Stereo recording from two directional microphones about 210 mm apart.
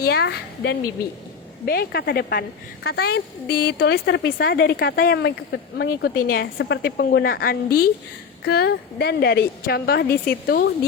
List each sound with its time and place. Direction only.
0.0 s speech: 50° left (ahead or behind)